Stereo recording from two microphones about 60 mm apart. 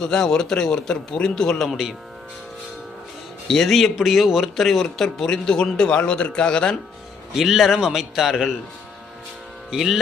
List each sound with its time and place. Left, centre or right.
0.0 s a man's voice: centre
3.5 s a man's voice: centre
7.3 s speech: centre
9.7 s speech: centre